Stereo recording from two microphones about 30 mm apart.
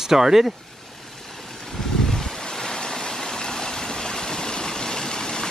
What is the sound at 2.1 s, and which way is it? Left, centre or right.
Vehicle, centre.